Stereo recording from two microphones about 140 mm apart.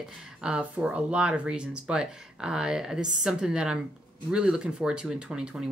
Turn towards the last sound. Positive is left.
turn(degrees=-5)  # may be behind; listen again after turning